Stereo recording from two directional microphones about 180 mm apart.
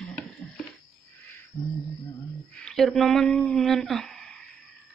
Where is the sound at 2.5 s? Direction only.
5° left (ahead or behind).